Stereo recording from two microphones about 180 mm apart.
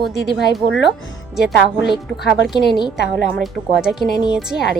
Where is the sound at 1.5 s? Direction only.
Centre (ahead or behind).